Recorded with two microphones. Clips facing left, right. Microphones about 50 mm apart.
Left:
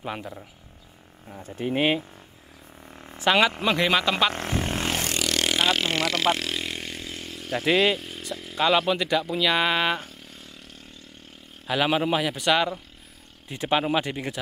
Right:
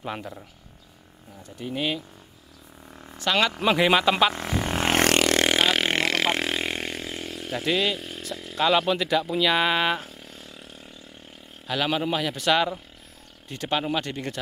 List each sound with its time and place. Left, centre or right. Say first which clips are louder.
0.0 s speech: even; centre
1.3 s speech: left 5 dB; left
3.1 s speech: left 3 dB; left
3.6 s speech: right 2 dB; centre
4.6 s vehicle: right 1 dB; right
4.9 s vehicle: right 7 dB; right
5.3 s vehicle: right 2 dB; right
7.5 s a man's voice: left 4 dB; centre
8.0 s speech: even; centre
11.6 s a man's voice: left 2 dB; centre
13.5 s a man's voice: left 3 dB; centre